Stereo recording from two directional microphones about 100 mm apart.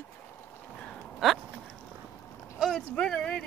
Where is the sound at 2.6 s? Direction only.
5° left (ahead or behind).